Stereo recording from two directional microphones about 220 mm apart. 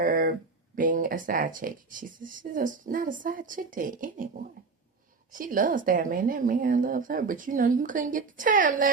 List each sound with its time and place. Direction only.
0.0 s a sound: 40° right (ahead or behind)
0.8 s speech: 40° right (ahead or behind)
5.3 s speech: 40° right (ahead or behind)